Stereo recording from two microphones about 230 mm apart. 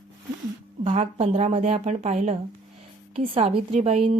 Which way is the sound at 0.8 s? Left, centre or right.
Right.